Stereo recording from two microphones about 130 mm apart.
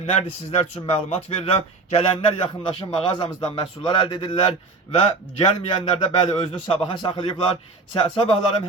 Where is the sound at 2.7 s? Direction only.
40° left (ahead or behind).